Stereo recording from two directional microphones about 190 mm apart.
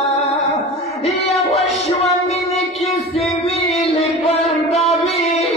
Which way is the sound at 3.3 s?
35° left (ahead or behind).